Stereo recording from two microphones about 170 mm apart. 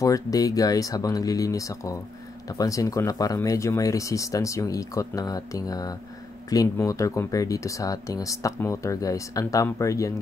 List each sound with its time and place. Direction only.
0.0 s speech: 20° left (ahead or behind)